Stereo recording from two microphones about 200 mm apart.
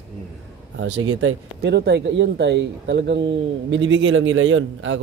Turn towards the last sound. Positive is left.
turn(degrees=-70)  # may be behind; listen again after turning